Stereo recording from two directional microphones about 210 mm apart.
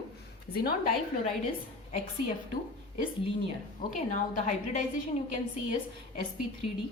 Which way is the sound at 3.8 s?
35° left (ahead or behind).